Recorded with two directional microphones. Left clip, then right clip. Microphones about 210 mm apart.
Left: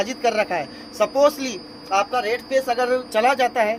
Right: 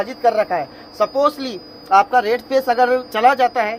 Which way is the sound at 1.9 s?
20° right (ahead or behind).